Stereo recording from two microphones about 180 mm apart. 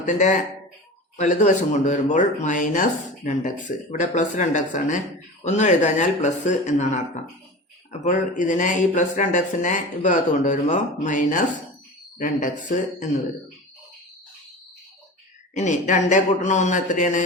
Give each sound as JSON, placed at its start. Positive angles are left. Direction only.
{"t": 0.0, "sound": "speech", "side_deg": 40}
{"t": 15.5, "sound": "speech", "side_deg": 40}